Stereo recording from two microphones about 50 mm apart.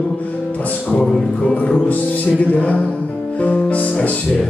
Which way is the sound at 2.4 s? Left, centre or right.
Left.